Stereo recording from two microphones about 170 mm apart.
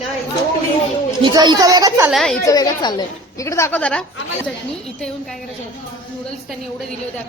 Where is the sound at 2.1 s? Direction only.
Centre (ahead or behind).